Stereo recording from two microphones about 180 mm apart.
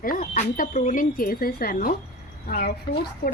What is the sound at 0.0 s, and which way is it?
A woman's voice, 50° left (ahead or behind).